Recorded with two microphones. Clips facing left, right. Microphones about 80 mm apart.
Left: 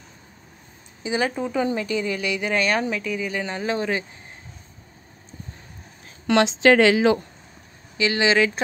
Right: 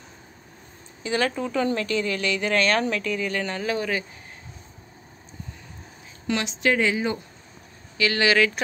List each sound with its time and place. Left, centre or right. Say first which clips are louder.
1.0 s speech: left 1 dB; centre
6.2 s a woman's voice: left 7 dB; left
8.0 s speech: left 1 dB; left